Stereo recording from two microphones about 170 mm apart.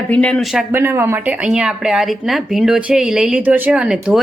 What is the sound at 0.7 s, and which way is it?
A woman's voice, 15° right (ahead or behind).